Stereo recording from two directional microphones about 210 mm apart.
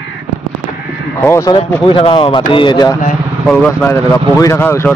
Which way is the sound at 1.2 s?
15° left (ahead or behind).